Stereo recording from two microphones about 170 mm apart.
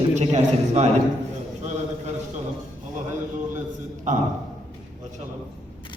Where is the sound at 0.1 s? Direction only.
40° right (ahead or behind).